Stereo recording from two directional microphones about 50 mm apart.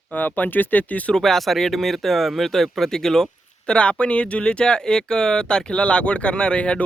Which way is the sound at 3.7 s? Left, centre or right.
Left.